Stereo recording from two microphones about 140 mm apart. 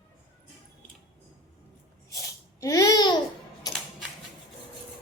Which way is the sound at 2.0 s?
25° left (ahead or behind).